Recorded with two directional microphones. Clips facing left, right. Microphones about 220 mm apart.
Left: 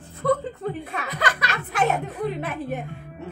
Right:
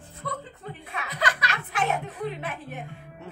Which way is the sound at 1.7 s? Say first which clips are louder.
Left 5 dB; 45° left (ahead or behind).